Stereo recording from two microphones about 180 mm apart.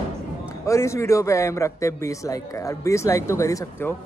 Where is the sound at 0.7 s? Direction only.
15° left (ahead or behind).